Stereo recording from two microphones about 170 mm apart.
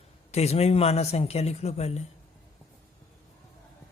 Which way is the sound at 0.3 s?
40° left (ahead or behind).